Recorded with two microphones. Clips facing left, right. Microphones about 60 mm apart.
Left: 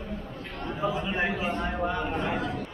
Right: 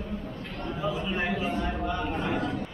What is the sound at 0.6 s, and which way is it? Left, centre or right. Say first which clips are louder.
A man's voice: left 1 dB; left.